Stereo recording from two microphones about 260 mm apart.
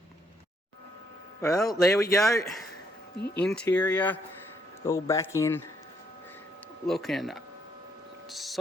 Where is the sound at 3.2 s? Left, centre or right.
Left.